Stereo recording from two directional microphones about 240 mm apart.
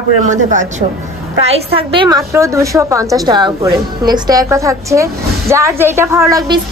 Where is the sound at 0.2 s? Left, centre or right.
Right.